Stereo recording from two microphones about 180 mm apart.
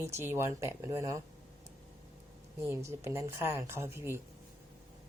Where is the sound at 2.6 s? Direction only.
15° right (ahead or behind).